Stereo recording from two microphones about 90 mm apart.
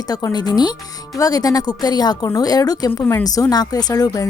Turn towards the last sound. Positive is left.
turn(degrees=40)  # may be behind; listen again after turning